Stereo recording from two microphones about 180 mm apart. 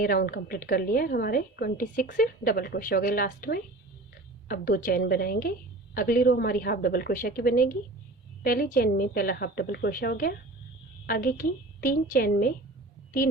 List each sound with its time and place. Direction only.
0.0 s a woman's voice: 55° left (ahead or behind)